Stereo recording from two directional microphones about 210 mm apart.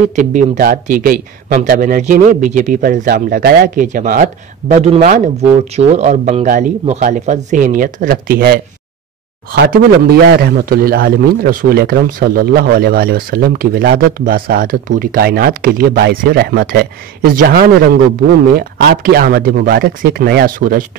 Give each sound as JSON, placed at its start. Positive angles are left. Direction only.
{"t": 0.1, "sound": "speech", "side_deg": -35}